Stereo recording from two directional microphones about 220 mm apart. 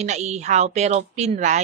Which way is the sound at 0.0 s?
30° right (ahead or behind).